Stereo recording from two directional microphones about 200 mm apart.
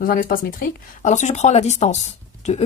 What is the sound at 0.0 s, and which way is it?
Speech, 45° left (ahead or behind).